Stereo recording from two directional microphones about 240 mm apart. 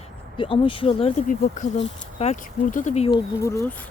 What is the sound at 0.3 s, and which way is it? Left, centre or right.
Speech, left.